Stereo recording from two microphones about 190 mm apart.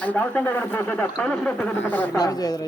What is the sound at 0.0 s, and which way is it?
Speech, 10° left (ahead or behind).